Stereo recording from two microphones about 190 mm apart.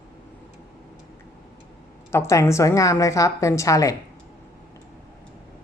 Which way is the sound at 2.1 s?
15° left (ahead or behind).